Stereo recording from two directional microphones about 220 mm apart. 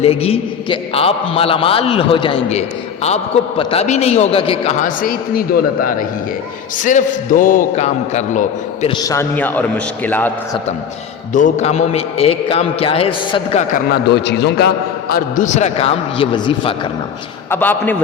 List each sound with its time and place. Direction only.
0.0 s a man's voice: 25° left (ahead or behind)
6.8 s a man's voice: 35° left (ahead or behind)
8.9 s a man's voice: 15° left (ahead or behind)
11.3 s a man's voice: 35° left (ahead or behind)
14.3 s a man's voice: 50° left (ahead or behind)
15.1 s a man's voice: 35° left (ahead or behind)
17.5 s a man's voice: 10° left (ahead or behind)